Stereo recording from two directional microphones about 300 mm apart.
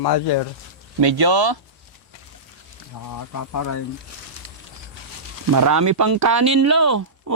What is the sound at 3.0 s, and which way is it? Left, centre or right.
Speech, left.